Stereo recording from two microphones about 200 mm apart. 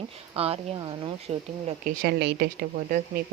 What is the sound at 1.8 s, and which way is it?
Speech, 50° right (ahead or behind).